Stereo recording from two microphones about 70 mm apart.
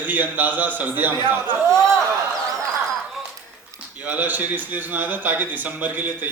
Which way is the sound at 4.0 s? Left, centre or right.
Right.